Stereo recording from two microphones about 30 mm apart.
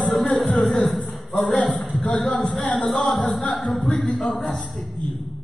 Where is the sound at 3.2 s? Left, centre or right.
Centre.